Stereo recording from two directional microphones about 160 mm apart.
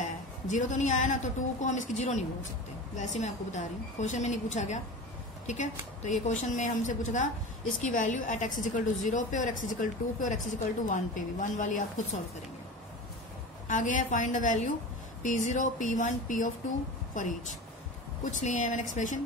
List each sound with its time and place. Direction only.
0.0 s a woman's voice: 50° left (ahead or behind)
6.0 s a woman's voice: 50° left (ahead or behind)
13.7 s a woman's voice: 55° left (ahead or behind)